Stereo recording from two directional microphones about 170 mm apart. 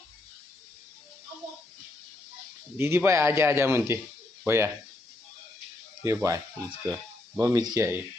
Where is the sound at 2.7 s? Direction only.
15° right (ahead or behind).